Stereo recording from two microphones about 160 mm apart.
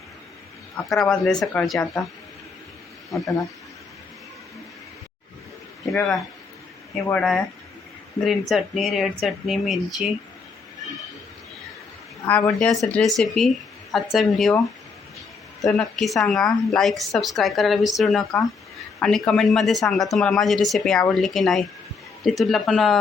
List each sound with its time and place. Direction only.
0.9 s a woman's voice: 5° left (ahead or behind)
3.1 s speech: 20° left (ahead or behind)
5.9 s a woman's voice: 5° left (ahead or behind)
12.5 s a woman's voice: centre (ahead or behind)
15.6 s a woman's voice: centre (ahead or behind)